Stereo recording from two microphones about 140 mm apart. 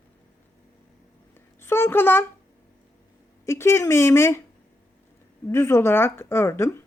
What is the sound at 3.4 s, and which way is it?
A woman's voice, 20° left (ahead or behind).